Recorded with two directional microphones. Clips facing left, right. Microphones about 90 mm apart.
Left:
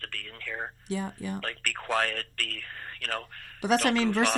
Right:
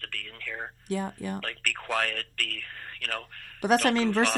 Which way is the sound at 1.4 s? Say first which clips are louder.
Even; 30° left (ahead or behind).